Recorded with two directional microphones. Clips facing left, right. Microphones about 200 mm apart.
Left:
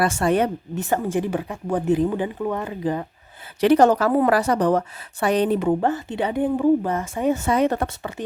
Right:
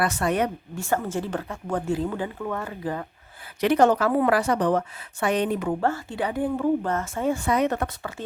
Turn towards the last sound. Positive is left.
turn(degrees=30)  # may be behind; listen again after turning